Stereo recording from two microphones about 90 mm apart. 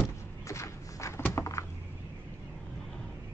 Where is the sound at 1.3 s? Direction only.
35° left (ahead or behind).